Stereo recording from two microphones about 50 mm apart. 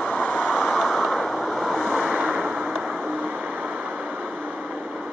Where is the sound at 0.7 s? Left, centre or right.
Centre.